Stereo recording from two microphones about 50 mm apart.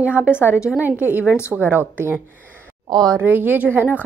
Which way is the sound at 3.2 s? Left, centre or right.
Right.